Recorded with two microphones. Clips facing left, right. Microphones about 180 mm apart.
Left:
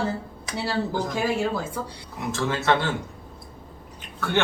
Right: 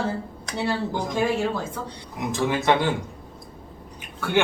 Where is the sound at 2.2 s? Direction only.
15° right (ahead or behind).